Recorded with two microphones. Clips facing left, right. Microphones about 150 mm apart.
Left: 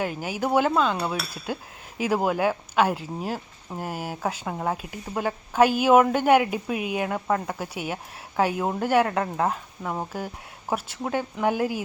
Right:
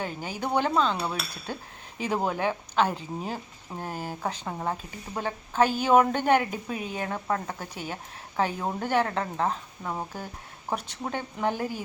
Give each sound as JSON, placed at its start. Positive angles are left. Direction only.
{"t": 0.0, "sound": "speech", "side_deg": 10}